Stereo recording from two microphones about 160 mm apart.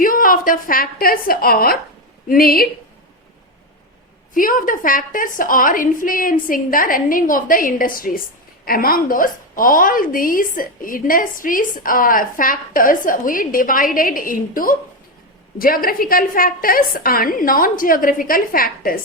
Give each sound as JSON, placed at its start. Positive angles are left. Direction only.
{"t": 0.0, "sound": "a woman's voice", "side_deg": 60}
{"t": 4.4, "sound": "a woman's voice", "side_deg": 60}